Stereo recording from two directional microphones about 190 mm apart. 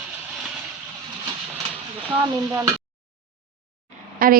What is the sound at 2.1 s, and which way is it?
Stir, 15° right (ahead or behind).